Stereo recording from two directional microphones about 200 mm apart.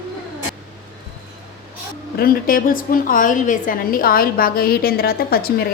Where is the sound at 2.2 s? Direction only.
45° left (ahead or behind).